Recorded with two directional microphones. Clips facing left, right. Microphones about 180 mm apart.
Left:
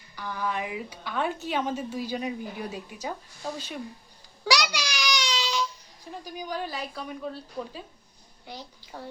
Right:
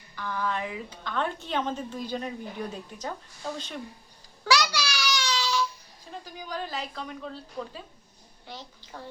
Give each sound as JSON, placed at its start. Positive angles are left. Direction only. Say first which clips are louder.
{"t": 0.2, "sound": "a woman's voice", "louder": "even", "side_deg": 10}
{"t": 4.4, "sound": "babbling", "louder": "right 1 dB", "side_deg": 15}
{"t": 6.2, "sound": "a woman's voice", "louder": "left 3 dB", "side_deg": 15}
{"t": 8.4, "sound": "a woman's voice", "louder": "left 1 dB", "side_deg": 15}